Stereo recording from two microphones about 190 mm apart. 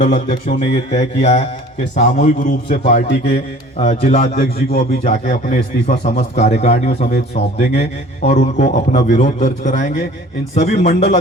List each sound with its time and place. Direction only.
0.0 s a man's voice: 35° left (ahead or behind)